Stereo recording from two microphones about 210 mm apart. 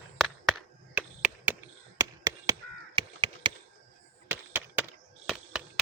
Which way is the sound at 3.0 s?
25° right (ahead or behind).